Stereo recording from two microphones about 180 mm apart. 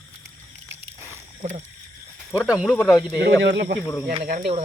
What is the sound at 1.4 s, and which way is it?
Speech, 40° right (ahead or behind).